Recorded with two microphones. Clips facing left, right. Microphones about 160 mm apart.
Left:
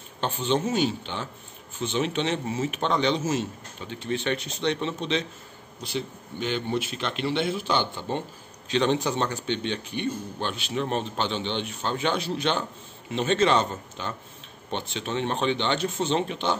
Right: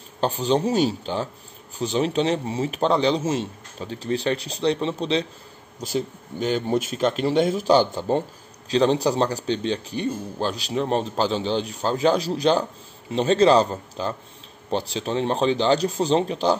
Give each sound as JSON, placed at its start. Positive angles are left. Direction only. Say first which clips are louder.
{"t": 0.2, "sound": "a man's voice", "louder": "right 4 dB", "side_deg": -35}